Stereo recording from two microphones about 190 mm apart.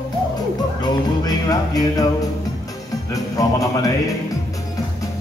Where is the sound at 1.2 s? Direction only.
20° left (ahead or behind).